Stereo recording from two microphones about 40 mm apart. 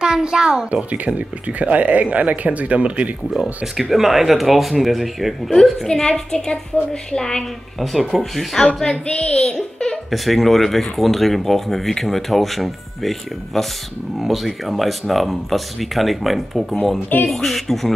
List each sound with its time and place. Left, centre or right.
0.0 s a child's voice: centre
0.9 s speech: right
3.3 s speech: centre
3.9 s speech: centre
5.9 s a woman's voice: centre
7.8 s speech: centre
9.0 s a woman's voice: left
10.1 s speech: centre
14.2 s speech: centre